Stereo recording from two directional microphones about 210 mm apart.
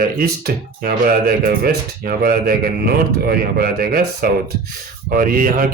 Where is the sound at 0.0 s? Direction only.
45° right (ahead or behind).